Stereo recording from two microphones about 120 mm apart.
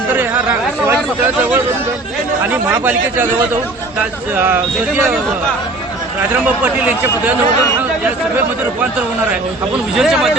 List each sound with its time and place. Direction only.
2.5 s speech: 15° right (ahead or behind)
4.4 s speech: 20° right (ahead or behind)
6.4 s speech: 15° right (ahead or behind)
9.9 s speech: 5° right (ahead or behind)